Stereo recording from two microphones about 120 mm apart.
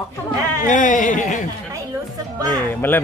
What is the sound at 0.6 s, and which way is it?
Speech, 90° left.